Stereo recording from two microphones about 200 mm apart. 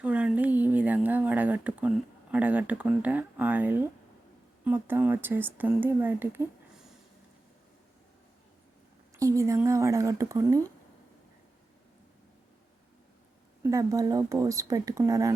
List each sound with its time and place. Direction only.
0.0 s a sound: 5° right (ahead or behind)
2.3 s speech: 5° right (ahead or behind)
9.1 s speech: 15° right (ahead or behind)
13.6 s speech: 15° right (ahead or behind)